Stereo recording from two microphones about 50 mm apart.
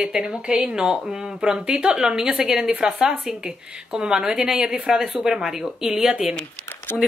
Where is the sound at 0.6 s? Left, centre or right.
Right.